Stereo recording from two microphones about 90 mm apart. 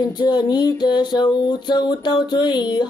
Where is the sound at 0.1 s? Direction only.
55° left (ahead or behind).